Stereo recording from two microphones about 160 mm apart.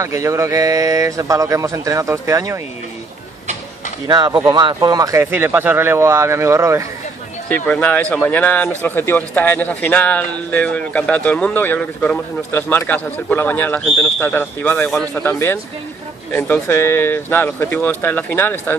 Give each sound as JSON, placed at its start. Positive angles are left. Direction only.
{"t": 0.0, "sound": "speech", "side_deg": -20}
{"t": 4.1, "sound": "speech", "side_deg": -25}
{"t": 7.4, "sound": "speech", "side_deg": 10}
{"t": 16.6, "sound": "speech", "side_deg": 15}